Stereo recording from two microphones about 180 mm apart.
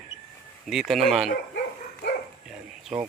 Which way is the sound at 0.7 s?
Centre (ahead or behind).